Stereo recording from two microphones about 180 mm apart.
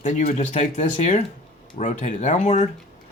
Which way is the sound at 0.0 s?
45° left (ahead or behind).